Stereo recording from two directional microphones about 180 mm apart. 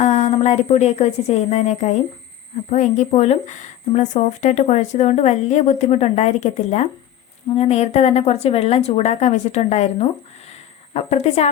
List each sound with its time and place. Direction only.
0.0 s a woman's voice: 40° left (ahead or behind)